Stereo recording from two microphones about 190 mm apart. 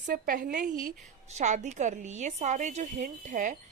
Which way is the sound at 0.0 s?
45° right (ahead or behind).